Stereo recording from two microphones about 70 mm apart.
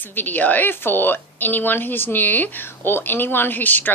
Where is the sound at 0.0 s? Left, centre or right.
Left.